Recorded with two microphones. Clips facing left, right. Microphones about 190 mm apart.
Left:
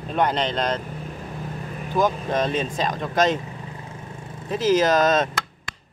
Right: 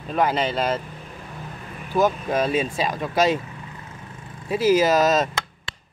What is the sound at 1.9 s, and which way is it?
Speech, 5° right (ahead or behind).